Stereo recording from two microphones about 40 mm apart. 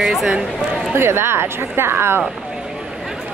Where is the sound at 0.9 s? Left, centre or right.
Right.